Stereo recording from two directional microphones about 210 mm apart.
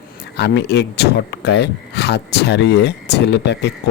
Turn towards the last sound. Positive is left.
turn(degrees=55)  # may be behind; listen again after turning